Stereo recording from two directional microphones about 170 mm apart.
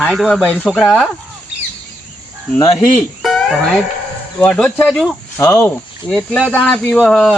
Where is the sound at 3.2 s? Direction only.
Centre (ahead or behind).